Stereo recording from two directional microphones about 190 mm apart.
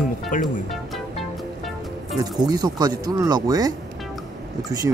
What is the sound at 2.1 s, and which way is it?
Speech, 20° right (ahead or behind).